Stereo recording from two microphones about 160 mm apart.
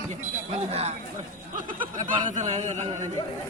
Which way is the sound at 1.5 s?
55° right (ahead or behind).